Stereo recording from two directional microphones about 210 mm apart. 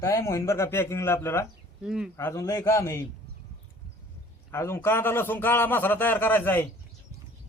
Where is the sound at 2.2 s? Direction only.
15° left (ahead or behind).